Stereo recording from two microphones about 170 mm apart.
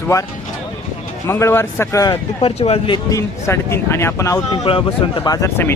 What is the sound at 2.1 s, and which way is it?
Speech, 35° left (ahead or behind).